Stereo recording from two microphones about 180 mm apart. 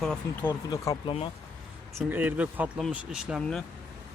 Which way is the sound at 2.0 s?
10° right (ahead or behind).